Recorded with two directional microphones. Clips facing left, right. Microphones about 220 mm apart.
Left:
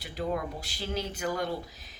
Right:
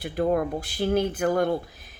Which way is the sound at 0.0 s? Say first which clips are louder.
Right 8 dB; 55° right (ahead or behind).